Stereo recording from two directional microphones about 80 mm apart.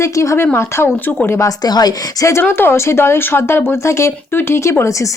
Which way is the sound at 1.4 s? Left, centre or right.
Left.